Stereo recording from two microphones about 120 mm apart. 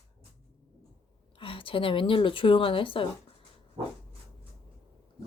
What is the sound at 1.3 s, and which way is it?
A woman's voice, 45° left (ahead or behind).